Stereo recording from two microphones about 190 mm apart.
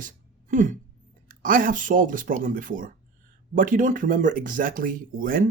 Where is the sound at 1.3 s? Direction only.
45° right (ahead or behind).